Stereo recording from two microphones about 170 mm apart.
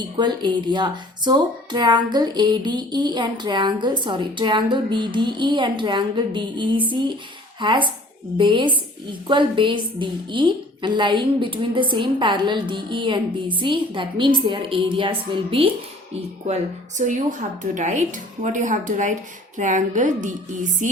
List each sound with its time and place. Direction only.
0.2 s speech: 25° right (ahead or behind)
17.0 s a woman's voice: 50° right (ahead or behind)